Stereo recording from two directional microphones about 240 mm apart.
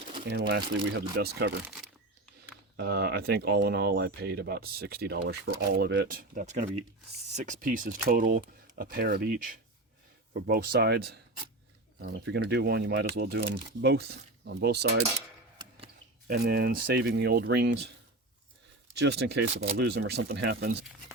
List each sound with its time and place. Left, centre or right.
0.3 s speech: right
2.7 s speech: right
16.2 s speech: right
18.9 s speech: right